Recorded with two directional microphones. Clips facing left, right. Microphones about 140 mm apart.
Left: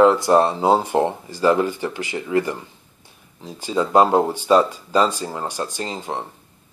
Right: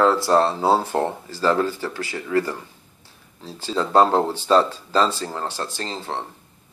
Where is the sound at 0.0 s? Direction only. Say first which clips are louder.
Left 3 dB; 15° left (ahead or behind).